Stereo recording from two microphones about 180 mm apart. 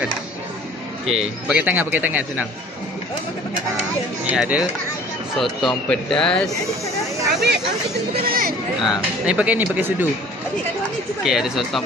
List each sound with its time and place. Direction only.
1.1 s a man's voice: 10° right (ahead or behind)
4.3 s speech: 5° right (ahead or behind)
8.3 s speech: 55° right (ahead or behind)
8.8 s a man's voice: 5° right (ahead or behind)
11.2 s speech: centre (ahead or behind)